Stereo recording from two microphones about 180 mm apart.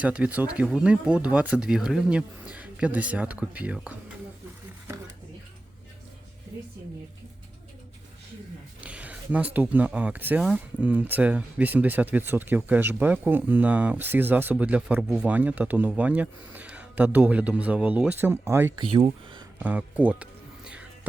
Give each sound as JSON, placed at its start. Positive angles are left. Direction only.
{"t": 0.0, "sound": "speech", "side_deg": -5}
{"t": 8.8, "sound": "speech", "side_deg": -5}
{"t": 18.8, "sound": "speech", "side_deg": -30}
{"t": 19.0, "sound": "a sound", "side_deg": -25}
{"t": 19.5, "sound": "speech", "side_deg": -10}